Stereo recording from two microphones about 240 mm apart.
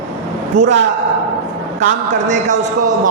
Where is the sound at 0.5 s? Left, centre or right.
Right.